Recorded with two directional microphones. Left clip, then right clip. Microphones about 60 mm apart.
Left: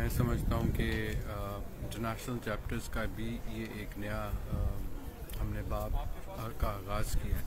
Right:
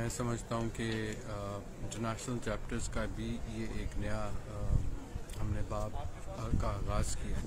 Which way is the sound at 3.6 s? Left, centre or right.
Right.